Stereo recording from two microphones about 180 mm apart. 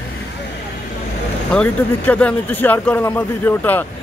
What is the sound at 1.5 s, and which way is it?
A man's voice, 5° left (ahead or behind).